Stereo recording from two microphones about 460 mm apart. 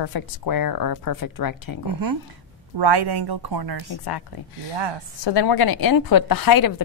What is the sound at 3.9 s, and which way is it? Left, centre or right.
Speech, left.